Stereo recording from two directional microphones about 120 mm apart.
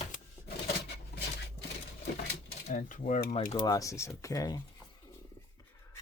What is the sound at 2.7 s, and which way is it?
Mechanisms, 90° left.